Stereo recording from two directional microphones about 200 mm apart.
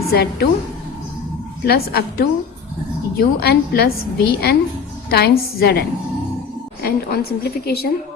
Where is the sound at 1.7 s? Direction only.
50° left (ahead or behind).